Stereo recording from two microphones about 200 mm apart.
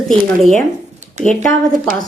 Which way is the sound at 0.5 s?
35° right (ahead or behind).